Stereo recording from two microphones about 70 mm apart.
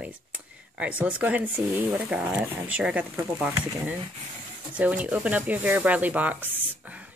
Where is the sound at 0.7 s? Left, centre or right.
Centre.